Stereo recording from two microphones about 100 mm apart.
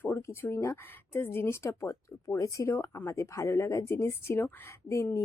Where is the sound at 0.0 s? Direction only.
25° left (ahead or behind).